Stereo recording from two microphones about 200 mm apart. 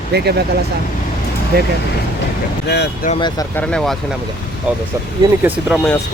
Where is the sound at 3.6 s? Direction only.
5° left (ahead or behind).